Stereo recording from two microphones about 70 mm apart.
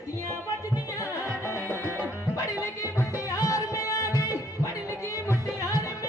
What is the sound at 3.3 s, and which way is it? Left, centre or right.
Music, left.